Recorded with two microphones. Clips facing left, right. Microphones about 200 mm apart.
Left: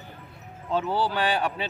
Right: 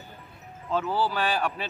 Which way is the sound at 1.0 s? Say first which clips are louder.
Left 1 dB; 5° right (ahead or behind).